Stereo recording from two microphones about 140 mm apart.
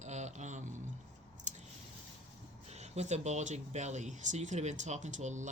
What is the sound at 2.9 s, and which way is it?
Speech, 55° right (ahead or behind).